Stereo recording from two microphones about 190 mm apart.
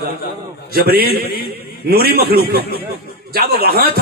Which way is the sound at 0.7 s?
50° right (ahead or behind).